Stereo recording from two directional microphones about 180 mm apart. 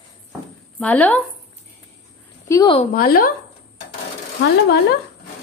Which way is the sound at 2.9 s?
55° left (ahead or behind).